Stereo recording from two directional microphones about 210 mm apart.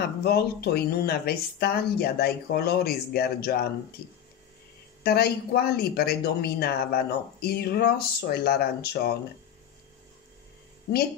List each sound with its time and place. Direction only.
0.2 s speech: 50° left (ahead or behind)